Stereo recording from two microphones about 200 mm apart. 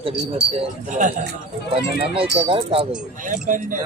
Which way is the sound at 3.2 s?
40° right (ahead or behind).